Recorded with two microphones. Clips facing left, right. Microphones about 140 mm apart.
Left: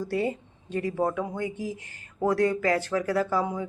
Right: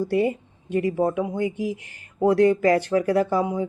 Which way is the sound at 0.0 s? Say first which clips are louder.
Right 6 dB; 15° right (ahead or behind).